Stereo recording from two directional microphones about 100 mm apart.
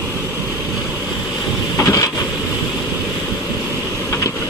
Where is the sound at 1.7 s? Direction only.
35° left (ahead or behind).